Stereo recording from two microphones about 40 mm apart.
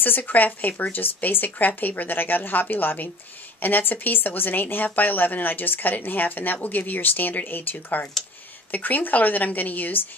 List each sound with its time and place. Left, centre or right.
0.0 s a woman's voice: left